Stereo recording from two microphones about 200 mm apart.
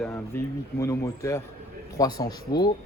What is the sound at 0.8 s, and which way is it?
Speech, 15° left (ahead or behind).